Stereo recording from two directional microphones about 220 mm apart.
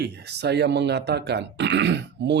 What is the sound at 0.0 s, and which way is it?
Speech, 50° right (ahead or behind).